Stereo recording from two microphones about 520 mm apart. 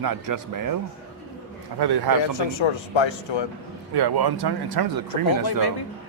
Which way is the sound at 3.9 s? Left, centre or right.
Right.